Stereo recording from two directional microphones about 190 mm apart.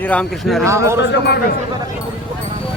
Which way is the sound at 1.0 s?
65° left (ahead or behind).